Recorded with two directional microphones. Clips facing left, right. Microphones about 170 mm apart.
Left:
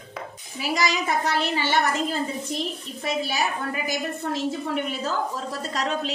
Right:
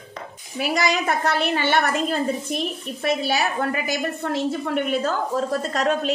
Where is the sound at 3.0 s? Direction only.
70° right (ahead or behind).